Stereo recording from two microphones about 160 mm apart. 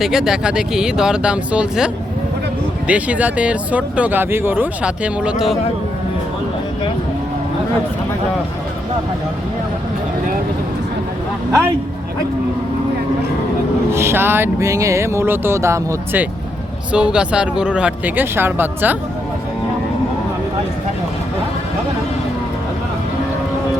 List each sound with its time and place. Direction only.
0.0 s speech: 5° right (ahead or behind)
13.9 s speech: 15° right (ahead or behind)
16.9 s speech: 5° right (ahead or behind)